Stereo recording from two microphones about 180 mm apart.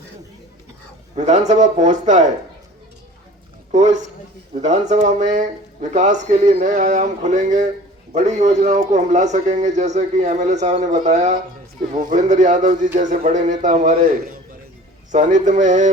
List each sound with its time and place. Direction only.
1.1 s speech: 40° right (ahead or behind)
3.7 s a man's voice: 40° right (ahead or behind)